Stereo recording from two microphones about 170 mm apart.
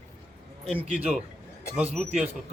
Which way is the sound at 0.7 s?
10° right (ahead or behind).